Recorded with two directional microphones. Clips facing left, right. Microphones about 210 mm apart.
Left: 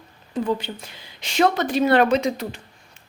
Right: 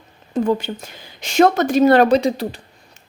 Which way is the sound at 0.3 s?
45° right (ahead or behind).